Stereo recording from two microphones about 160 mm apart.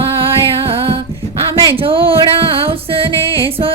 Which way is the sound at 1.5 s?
20° right (ahead or behind).